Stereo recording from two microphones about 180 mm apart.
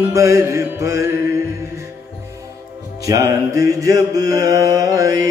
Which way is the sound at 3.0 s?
20° right (ahead or behind).